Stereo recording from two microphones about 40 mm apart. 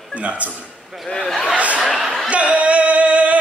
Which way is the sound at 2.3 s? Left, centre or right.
Right.